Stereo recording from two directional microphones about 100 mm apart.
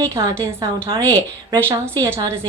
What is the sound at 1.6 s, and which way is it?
Speech, 25° right (ahead or behind).